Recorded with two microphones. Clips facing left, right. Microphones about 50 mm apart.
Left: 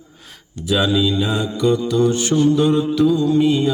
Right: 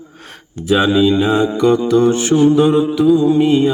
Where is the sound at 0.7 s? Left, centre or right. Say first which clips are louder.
Right 5 dB; right.